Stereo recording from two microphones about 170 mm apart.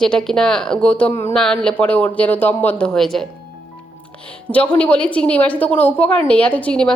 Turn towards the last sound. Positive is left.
turn(degrees=5)  # may be behind; listen again after turning